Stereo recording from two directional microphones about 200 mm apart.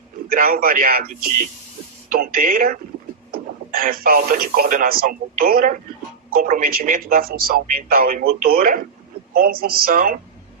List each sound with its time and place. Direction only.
0.3 s speech: 45° right (ahead or behind)